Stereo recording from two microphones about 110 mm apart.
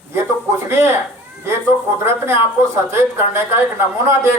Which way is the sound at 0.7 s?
20° right (ahead or behind).